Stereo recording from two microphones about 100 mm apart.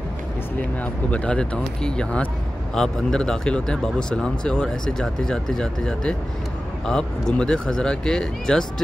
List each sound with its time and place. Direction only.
1.1 s speech: 10° left (ahead or behind)